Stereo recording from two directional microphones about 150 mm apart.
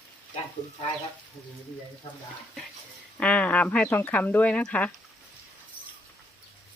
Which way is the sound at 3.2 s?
10° left (ahead or behind).